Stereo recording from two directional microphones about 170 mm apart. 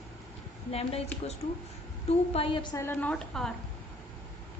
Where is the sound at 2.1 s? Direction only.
35° left (ahead or behind).